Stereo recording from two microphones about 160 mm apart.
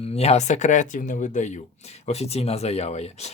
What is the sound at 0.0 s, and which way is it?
Speech, 40° left (ahead or behind).